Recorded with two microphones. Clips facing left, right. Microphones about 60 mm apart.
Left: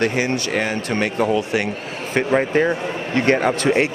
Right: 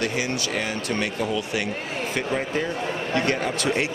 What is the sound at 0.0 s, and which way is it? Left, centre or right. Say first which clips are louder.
Speech: left 6 dB; left.